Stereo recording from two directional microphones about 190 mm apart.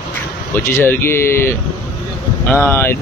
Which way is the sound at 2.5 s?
10° left (ahead or behind).